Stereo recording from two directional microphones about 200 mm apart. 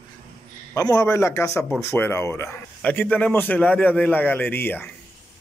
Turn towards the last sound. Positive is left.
turn(degrees=10)  # may be behind; listen again after turning